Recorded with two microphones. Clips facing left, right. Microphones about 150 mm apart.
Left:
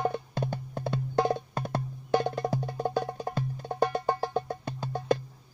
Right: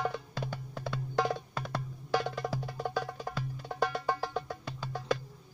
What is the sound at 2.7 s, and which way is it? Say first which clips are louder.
Music: left 5 dB; 45° left (ahead or behind).